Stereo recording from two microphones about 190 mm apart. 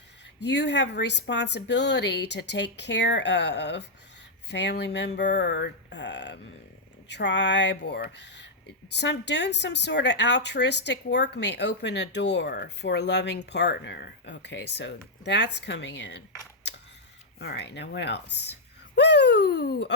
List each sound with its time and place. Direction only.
0.3 s speech: 65° left (ahead or behind)
17.4 s speech: 65° left (ahead or behind)